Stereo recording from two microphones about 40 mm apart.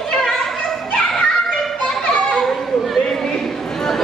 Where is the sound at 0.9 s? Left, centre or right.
Left.